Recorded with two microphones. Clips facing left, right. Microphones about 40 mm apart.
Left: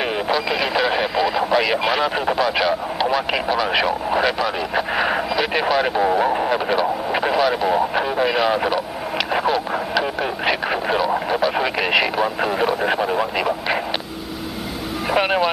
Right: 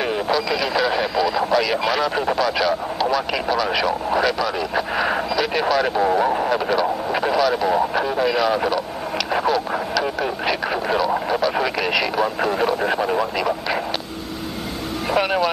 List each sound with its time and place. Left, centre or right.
0.3 s speech: left
15.1 s speech: centre